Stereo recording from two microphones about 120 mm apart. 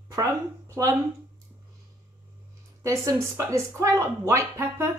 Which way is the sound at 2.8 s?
30° right (ahead or behind).